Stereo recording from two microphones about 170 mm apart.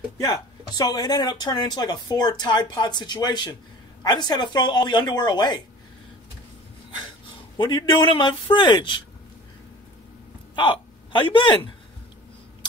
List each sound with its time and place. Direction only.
0.2 s speech: 25° left (ahead or behind)
7.5 s speech: 25° left (ahead or behind)
10.5 s speech: 30° left (ahead or behind)